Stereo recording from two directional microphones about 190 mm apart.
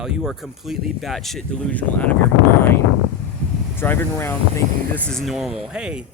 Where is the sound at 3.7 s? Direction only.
10° left (ahead or behind).